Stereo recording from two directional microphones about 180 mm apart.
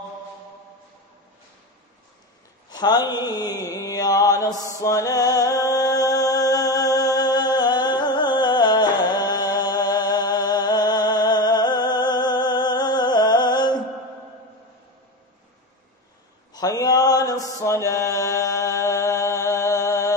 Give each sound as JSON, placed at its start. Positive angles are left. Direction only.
{"t": 2.7, "sound": "mantra", "side_deg": 20}
{"t": 4.7, "sound": "music", "side_deg": 20}
{"t": 16.5, "sound": "mantra", "side_deg": 20}